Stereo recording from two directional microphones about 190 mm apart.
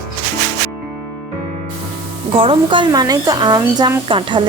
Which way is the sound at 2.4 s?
25° right (ahead or behind).